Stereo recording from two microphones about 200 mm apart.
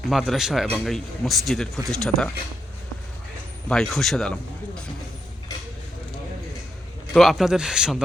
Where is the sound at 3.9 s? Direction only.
Centre (ahead or behind).